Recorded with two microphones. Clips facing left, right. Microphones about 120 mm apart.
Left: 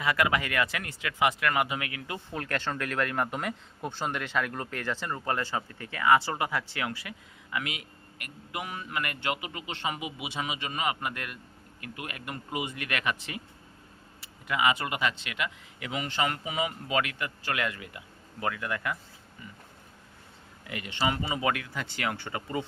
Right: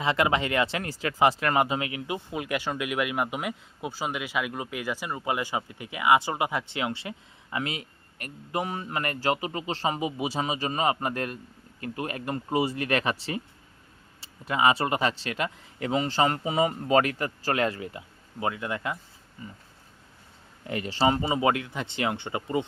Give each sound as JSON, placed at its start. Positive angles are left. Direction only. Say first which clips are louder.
{"t": 0.0, "sound": "speech", "louder": "right 3 dB", "side_deg": -25}
{"t": 20.7, "sound": "speech", "louder": "right 6 dB", "side_deg": -35}